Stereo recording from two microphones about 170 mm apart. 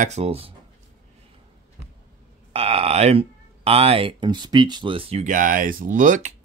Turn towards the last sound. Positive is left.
turn(degrees=-50)  # may be behind; listen again after turning